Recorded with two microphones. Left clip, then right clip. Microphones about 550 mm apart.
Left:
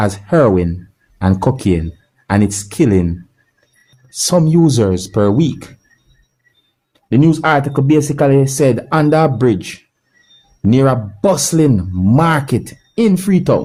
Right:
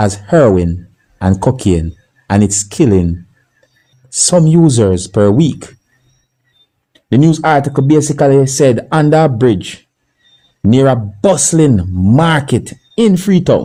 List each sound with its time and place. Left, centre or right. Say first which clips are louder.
0.0 s speech: right 3 dB; left
4.3 s speech: right 2 dB; left
6.9 s speech: right 2 dB; left